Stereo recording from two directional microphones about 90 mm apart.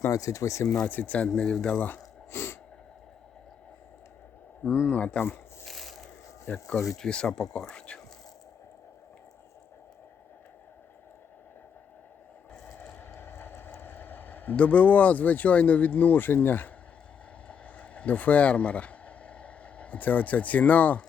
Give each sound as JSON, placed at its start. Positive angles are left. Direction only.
{"t": 0.1, "sound": "speech", "side_deg": 40}
{"t": 0.7, "sound": "speech", "side_deg": 15}
{"t": 2.3, "sound": "sneeze", "side_deg": 30}
{"t": 4.6, "sound": "speech", "side_deg": -10}
{"t": 4.9, "sound": "speech", "side_deg": 15}
{"t": 5.6, "sound": "a sound", "side_deg": 0}
{"t": 6.7, "sound": "speech", "side_deg": 5}
{"t": 13.1, "sound": "a sound", "side_deg": 25}
{"t": 13.7, "sound": "speech", "side_deg": 20}
{"t": 17.5, "sound": "a sound", "side_deg": 15}